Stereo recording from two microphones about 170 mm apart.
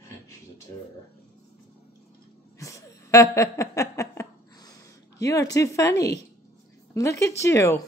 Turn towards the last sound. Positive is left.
turn(degrees=15)  # may be behind; listen again after turning